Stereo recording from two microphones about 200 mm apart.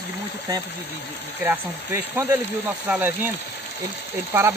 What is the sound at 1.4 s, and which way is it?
Speech, 10° right (ahead or behind).